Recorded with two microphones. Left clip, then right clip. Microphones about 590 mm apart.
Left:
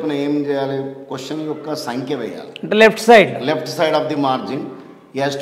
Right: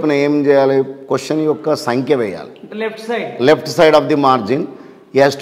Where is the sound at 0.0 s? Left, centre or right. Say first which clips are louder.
Right 6 dB; right.